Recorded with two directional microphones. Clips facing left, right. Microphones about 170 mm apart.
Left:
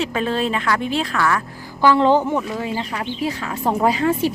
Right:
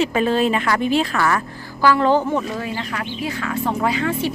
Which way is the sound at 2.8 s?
30° left (ahead or behind).